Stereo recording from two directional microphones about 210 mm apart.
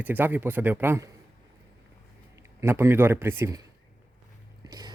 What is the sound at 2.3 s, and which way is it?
Speech, 15° right (ahead or behind).